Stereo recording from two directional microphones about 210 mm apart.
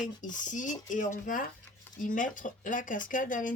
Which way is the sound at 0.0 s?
35° left (ahead or behind).